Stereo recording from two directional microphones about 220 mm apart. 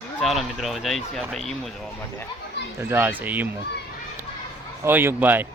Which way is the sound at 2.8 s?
10° right (ahead or behind).